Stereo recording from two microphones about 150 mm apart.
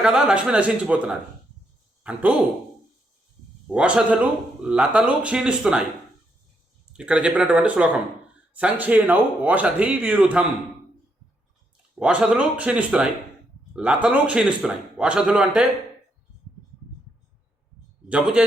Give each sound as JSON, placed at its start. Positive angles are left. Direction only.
{"t": 0.0, "sound": "speech", "side_deg": -5}
{"t": 3.7, "sound": "speech", "side_deg": -5}
{"t": 6.9, "sound": "speech", "side_deg": -5}
{"t": 11.9, "sound": "speech", "side_deg": -5}
{"t": 18.1, "sound": "speech", "side_deg": -10}